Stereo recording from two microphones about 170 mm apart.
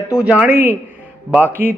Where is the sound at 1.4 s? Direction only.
10° left (ahead or behind).